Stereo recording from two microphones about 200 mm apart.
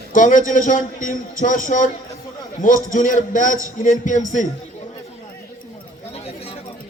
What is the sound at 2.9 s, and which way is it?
A man's voice, 40° left (ahead or behind).